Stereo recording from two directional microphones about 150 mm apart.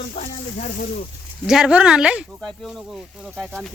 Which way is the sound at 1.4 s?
5° right (ahead or behind).